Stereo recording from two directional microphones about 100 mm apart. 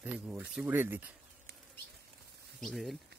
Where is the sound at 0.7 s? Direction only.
20° right (ahead or behind).